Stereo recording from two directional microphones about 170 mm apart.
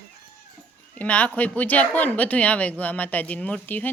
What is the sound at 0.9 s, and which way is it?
Speech, 10° left (ahead or behind).